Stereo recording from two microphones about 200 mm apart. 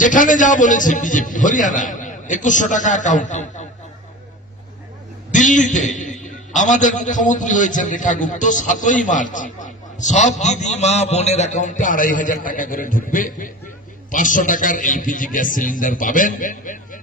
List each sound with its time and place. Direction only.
0.0 s a man's voice: 40° left (ahead or behind)
5.3 s a man's voice: 40° left (ahead or behind)